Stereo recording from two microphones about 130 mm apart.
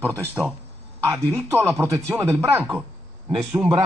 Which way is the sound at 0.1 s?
15° right (ahead or behind).